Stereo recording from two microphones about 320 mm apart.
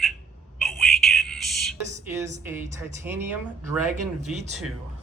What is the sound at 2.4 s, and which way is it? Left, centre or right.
Speech, centre.